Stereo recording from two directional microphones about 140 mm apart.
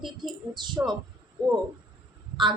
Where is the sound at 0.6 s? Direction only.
30° right (ahead or behind).